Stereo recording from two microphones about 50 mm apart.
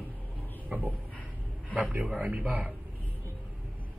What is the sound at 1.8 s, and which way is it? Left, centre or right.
Speech, right.